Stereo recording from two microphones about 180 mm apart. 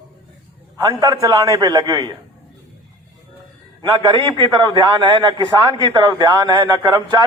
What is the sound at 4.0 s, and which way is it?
A man's voice, 25° right (ahead or behind).